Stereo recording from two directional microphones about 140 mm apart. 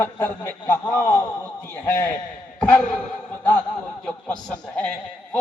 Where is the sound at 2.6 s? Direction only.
10° left (ahead or behind).